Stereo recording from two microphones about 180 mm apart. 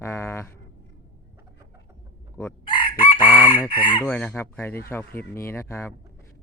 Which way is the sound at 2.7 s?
30° left (ahead or behind).